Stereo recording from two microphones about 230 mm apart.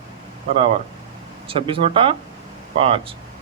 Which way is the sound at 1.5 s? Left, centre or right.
Right.